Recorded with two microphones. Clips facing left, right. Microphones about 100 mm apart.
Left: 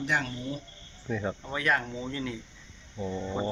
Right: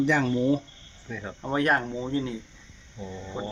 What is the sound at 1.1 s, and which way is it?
Speech, 5° left (ahead or behind).